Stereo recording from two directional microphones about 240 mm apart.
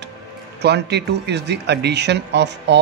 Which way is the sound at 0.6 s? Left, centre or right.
Right.